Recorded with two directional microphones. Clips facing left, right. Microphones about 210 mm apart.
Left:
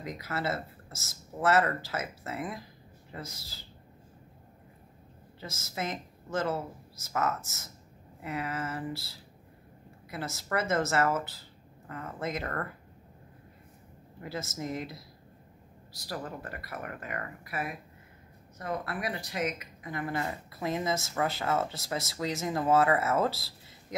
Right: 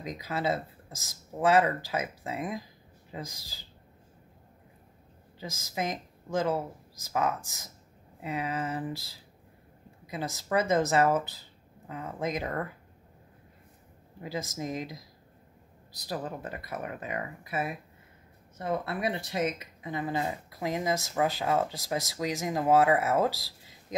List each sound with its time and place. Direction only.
0.0 s speech: 15° right (ahead or behind)
5.4 s speech: 15° right (ahead or behind)
14.2 s speech: 15° right (ahead or behind)
16.0 s speech: 20° right (ahead or behind)